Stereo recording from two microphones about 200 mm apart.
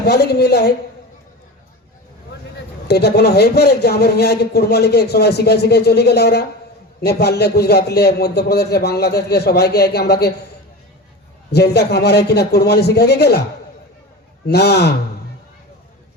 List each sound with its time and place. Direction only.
0.0 s a man's voice: 55° left (ahead or behind)
2.8 s a man's voice: 55° left (ahead or behind)
11.5 s a man's voice: 55° left (ahead or behind)
14.4 s a man's voice: 55° left (ahead or behind)